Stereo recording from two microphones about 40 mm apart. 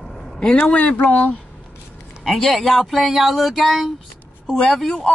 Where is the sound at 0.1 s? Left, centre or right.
Centre.